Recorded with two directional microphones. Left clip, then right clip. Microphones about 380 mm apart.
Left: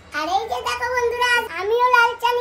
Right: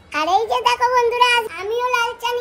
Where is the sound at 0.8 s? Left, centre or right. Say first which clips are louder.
Right 3 dB; centre.